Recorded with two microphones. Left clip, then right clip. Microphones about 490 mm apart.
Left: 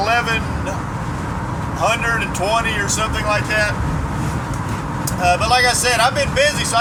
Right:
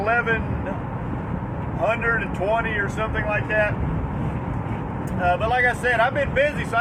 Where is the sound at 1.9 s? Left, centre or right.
Right.